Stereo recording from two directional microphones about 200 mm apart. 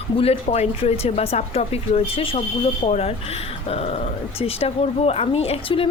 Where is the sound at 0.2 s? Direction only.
30° left (ahead or behind).